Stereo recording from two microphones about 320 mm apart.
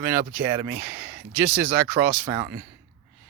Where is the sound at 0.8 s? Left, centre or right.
Centre.